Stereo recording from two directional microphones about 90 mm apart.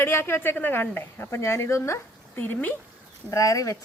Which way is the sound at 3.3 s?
40° left (ahead or behind).